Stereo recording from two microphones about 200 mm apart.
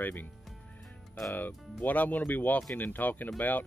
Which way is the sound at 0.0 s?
10° left (ahead or behind).